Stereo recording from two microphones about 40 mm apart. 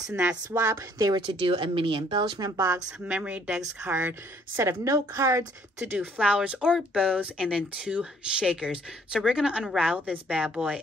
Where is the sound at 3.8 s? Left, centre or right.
Right.